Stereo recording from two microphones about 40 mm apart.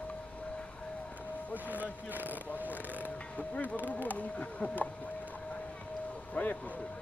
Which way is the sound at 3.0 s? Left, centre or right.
Left.